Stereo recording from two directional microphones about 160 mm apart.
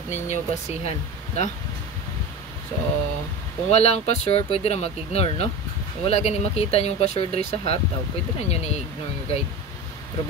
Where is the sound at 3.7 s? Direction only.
40° left (ahead or behind).